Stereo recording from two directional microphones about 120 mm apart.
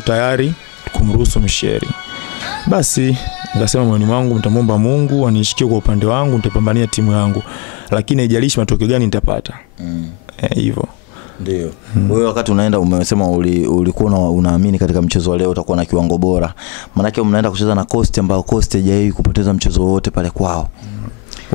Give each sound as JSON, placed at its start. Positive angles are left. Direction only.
{"t": 0.0, "sound": "speech", "side_deg": 15}
{"t": 5.7, "sound": "speech", "side_deg": 20}
{"t": 12.1, "sound": "speech", "side_deg": 20}
{"t": 15.4, "sound": "speech", "side_deg": 20}